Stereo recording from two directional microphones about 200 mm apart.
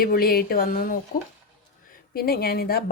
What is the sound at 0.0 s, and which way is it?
Speech, 45° left (ahead or behind).